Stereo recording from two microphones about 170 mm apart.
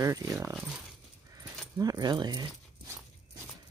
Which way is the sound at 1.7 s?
20° right (ahead or behind).